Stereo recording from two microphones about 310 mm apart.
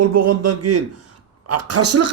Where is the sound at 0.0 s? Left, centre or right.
Right.